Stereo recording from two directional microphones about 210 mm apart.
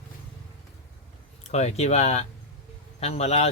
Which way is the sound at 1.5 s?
30° left (ahead or behind).